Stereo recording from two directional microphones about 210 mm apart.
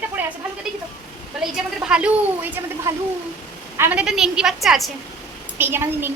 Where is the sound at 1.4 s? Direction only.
Centre (ahead or behind).